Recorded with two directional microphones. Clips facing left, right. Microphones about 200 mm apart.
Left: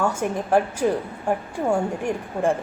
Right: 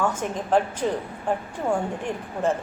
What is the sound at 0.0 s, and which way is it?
A woman's voice, 10° left (ahead or behind).